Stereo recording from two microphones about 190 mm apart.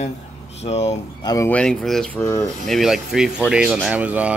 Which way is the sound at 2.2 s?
15° left (ahead or behind).